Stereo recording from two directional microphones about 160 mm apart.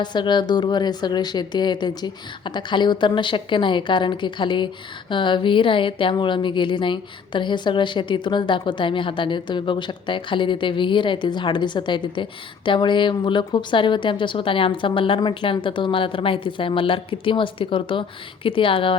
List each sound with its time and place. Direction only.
0.0 s speech: 30° left (ahead or behind)